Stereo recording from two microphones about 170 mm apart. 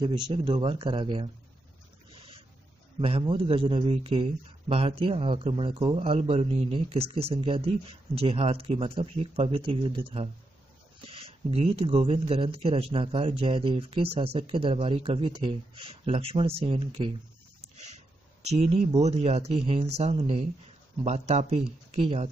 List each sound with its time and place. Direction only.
0.3 s speech: 30° right (ahead or behind)
3.0 s a man's voice: 30° right (ahead or behind)
21.0 s a man's voice: 40° right (ahead or behind)